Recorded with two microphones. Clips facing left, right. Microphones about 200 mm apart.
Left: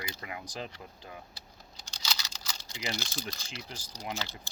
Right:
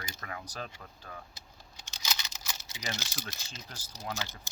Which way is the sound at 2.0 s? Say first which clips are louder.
Even; 20° right (ahead or behind).